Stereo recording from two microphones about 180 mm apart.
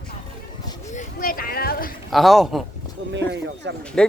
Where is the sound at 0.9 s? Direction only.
45° left (ahead or behind).